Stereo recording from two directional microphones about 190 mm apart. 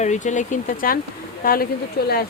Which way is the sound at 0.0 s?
40° left (ahead or behind).